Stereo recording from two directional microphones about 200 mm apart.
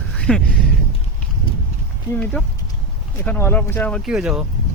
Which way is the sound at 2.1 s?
10° left (ahead or behind).